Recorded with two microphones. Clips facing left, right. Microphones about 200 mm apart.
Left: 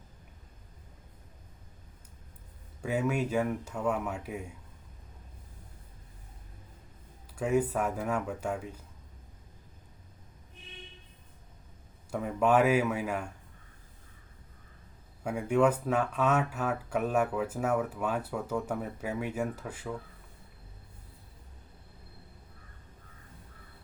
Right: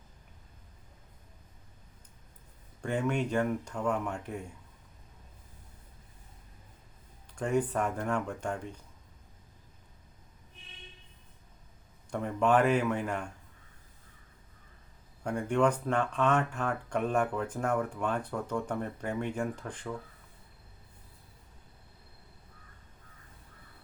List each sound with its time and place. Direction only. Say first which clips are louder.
2.8 s speech: left 1 dB; 5° left (ahead or behind)
7.3 s speech: left 1 dB; 5° left (ahead or behind)
12.1 s speech: left 1 dB; 5° left (ahead or behind)
15.2 s speech: left 2 dB; 5° left (ahead or behind)